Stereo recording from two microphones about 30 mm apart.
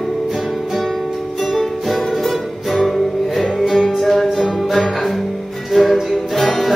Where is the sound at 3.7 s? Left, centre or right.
Centre.